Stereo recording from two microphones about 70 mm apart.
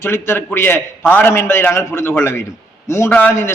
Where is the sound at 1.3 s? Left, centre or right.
Left.